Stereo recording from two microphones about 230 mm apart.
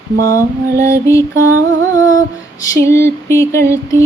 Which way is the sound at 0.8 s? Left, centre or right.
Centre.